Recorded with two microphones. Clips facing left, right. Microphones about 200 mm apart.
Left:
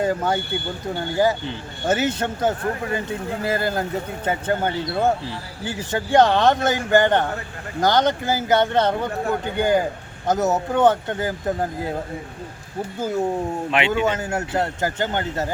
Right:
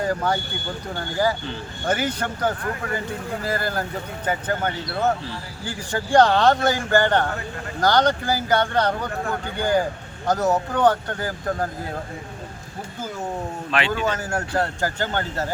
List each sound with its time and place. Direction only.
0.0 s speech: 25° left (ahead or behind)
13.7 s speech: 20° left (ahead or behind)